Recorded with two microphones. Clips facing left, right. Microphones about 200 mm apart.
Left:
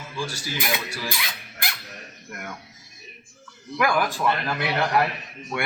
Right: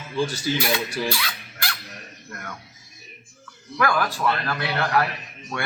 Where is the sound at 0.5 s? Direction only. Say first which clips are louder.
Right 7 dB; 25° right (ahead or behind).